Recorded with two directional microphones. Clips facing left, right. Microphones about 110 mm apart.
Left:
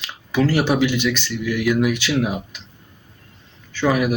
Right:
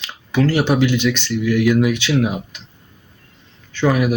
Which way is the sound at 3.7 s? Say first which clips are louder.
Right 2 dB; 5° left (ahead or behind).